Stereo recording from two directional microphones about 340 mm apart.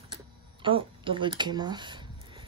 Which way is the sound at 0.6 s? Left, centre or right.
Centre.